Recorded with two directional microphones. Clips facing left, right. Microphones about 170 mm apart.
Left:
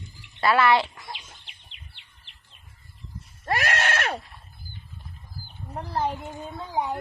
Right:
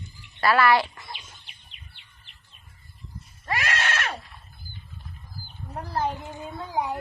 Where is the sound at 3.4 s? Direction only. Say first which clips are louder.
Left 3 dB; 50° left (ahead or behind).